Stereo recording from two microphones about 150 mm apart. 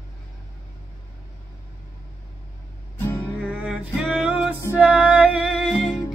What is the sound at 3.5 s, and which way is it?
Music, 5° right (ahead or behind).